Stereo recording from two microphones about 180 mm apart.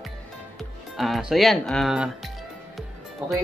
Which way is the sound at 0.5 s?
Centre (ahead or behind).